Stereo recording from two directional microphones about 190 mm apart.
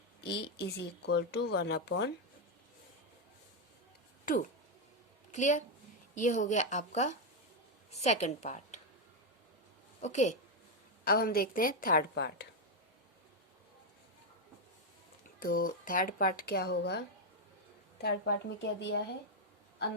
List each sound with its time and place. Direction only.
0.3 s speech: 60° left (ahead or behind)
5.3 s a woman's voice: 40° left (ahead or behind)
10.0 s a woman's voice: 40° left (ahead or behind)
11.0 s speech: 55° left (ahead or behind)
15.4 s speech: 50° left (ahead or behind)
18.0 s speech: 60° left (ahead or behind)